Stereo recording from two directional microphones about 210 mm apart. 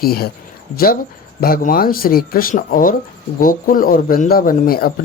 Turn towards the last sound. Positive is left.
turn(degrees=45)  # may be behind; listen again after turning